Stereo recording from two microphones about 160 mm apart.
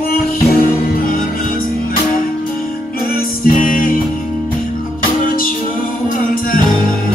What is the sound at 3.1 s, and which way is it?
Music, 60° left (ahead or behind).